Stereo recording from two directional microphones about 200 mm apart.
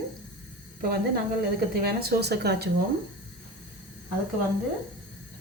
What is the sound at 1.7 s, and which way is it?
Speech, 50° right (ahead or behind).